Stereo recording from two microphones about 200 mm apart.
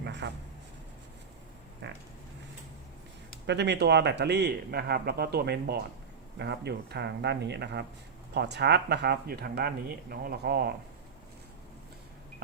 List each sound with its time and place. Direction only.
0.0 s a sound: 60° right (ahead or behind)
1.8 s speech: 60° right (ahead or behind)
3.4 s speech: 60° right (ahead or behind)